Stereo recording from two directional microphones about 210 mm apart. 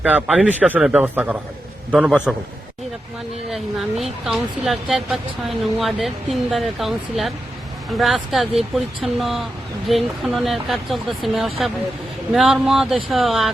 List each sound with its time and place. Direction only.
0.0 s a man's voice: 5° right (ahead or behind)
3.5 s speech: centre (ahead or behind)